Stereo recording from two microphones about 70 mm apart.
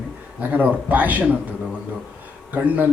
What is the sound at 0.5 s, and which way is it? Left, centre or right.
Speech, right.